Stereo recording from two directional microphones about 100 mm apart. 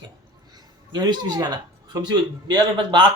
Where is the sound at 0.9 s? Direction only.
45° right (ahead or behind).